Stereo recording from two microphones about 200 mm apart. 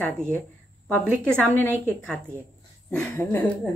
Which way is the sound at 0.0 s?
5° left (ahead or behind).